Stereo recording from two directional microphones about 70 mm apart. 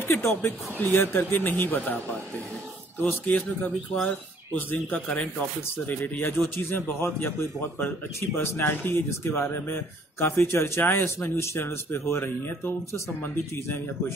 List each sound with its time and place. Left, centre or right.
0.0 s a man's voice: left
3.3 s a man's voice: left